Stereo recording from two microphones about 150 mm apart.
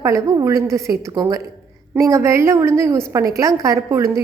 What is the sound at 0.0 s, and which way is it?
A woman's voice, 20° right (ahead or behind).